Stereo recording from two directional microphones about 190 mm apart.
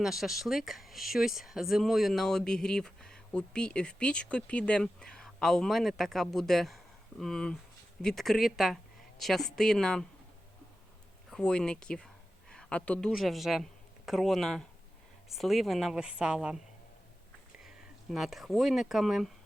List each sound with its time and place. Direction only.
0.0 s speech: centre (ahead or behind)
11.3 s speech: 5° left (ahead or behind)